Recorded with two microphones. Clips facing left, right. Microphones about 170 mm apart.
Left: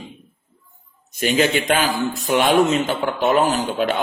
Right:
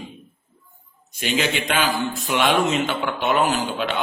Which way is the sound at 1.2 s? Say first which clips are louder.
Left 5 dB; 45° left (ahead or behind).